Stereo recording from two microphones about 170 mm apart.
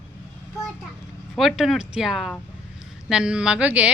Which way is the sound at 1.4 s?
Centre (ahead or behind).